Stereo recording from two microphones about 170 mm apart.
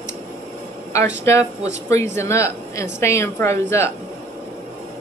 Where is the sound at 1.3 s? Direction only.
15° left (ahead or behind).